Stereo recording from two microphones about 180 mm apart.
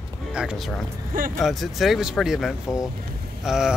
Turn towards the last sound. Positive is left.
turn(degrees=-5)  # may be behind; listen again after turning